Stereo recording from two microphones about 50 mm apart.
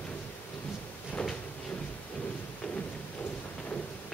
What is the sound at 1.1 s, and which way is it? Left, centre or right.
Drawer open or close, centre.